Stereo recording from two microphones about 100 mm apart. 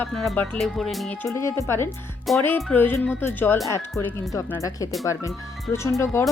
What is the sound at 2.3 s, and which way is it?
Speech, centre (ahead or behind).